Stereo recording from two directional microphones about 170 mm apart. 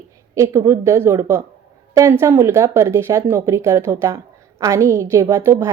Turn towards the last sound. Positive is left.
turn(degrees=-20)  # may be behind; listen again after turning